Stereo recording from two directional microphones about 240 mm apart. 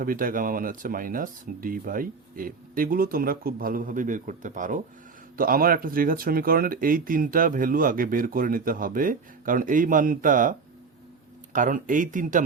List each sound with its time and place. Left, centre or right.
0.0 s speech: right
11.5 s speech: right